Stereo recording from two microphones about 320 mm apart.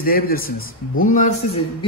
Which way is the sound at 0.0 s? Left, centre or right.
Left.